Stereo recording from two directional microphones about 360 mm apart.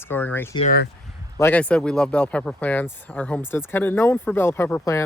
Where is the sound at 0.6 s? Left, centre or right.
Left.